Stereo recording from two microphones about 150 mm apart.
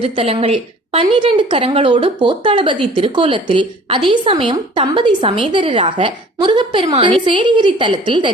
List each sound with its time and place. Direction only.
0.0 s a woman's voice: 40° right (ahead or behind)